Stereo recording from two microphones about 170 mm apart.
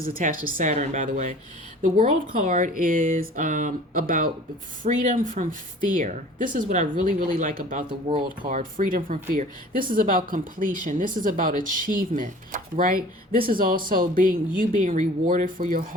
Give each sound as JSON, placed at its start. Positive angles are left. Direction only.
{"t": 0.0, "sound": "speech", "side_deg": -55}
{"t": 7.9, "sound": "speech", "side_deg": -30}
{"t": 8.4, "sound": "speech", "side_deg": -50}